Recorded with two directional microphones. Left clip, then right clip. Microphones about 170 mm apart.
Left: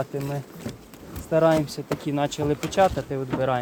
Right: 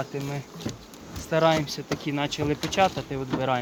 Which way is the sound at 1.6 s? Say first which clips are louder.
Left 1 dB; 60° left (ahead or behind).